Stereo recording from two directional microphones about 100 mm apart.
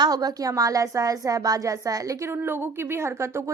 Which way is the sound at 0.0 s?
40° right (ahead or behind).